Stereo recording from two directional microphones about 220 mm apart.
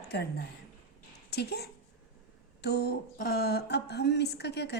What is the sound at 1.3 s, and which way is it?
Speech, 45° left (ahead or behind).